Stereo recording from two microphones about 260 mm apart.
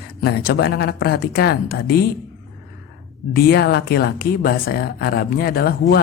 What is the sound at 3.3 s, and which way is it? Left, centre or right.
Speech, left.